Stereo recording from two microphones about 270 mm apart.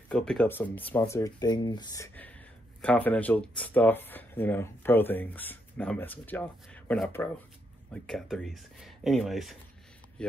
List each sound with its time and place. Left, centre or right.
0.1 s speech: centre